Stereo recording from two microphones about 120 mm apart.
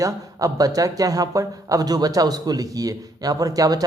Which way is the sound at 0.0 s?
30° right (ahead or behind).